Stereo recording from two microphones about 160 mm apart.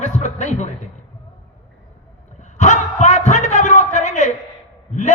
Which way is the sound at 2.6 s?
50° left (ahead or behind).